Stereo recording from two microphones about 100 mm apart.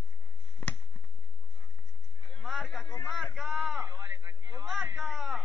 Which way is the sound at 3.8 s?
25° right (ahead or behind).